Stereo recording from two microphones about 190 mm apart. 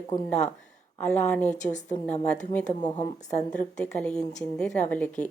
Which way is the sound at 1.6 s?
40° left (ahead or behind).